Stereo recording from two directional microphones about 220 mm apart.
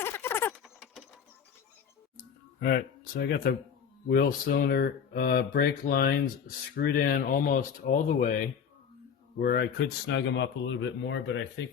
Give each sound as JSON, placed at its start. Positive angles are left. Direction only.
{"t": 0.0, "sound": "rodents", "side_deg": 10}
{"t": 2.6, "sound": "speech", "side_deg": 45}